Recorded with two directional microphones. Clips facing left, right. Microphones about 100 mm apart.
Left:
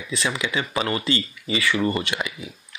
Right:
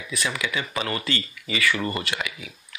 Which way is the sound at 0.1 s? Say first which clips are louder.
Left 3 dB; 25° left (ahead or behind).